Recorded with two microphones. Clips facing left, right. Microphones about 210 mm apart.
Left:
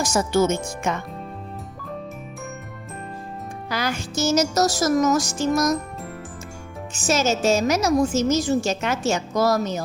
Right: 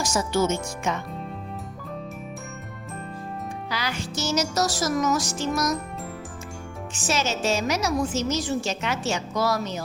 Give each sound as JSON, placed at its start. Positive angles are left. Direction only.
{"t": 0.0, "sound": "a woman's voice", "side_deg": 50}
{"t": 3.7, "sound": "a woman's voice", "side_deg": 45}
{"t": 6.9, "sound": "a woman's voice", "side_deg": 45}